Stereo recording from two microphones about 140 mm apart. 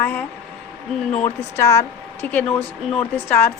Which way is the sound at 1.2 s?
20° left (ahead or behind).